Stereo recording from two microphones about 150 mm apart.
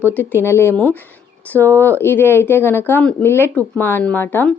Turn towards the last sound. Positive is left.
turn(degrees=10)  # may be behind; listen again after turning